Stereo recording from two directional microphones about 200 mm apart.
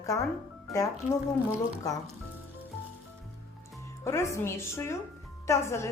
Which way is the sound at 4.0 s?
15° left (ahead or behind).